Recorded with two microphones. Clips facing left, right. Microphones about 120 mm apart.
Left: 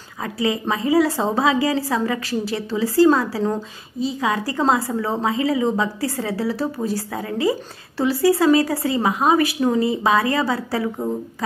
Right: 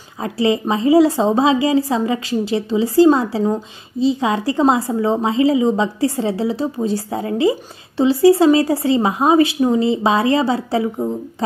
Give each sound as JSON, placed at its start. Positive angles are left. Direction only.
{"t": 0.2, "sound": "a woman's voice", "side_deg": -25}